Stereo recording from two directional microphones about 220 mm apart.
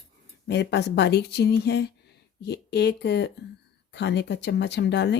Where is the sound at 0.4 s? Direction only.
50° left (ahead or behind).